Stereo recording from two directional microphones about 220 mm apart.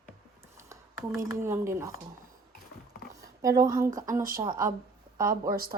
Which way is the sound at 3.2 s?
15° right (ahead or behind).